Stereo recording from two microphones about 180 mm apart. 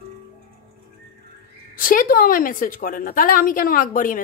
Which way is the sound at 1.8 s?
50° left (ahead or behind).